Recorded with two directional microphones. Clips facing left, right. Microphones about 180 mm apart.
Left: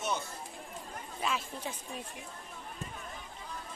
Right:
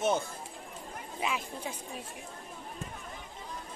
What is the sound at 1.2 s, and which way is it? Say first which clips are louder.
Speech: right 1 dB; 15° right (ahead or behind).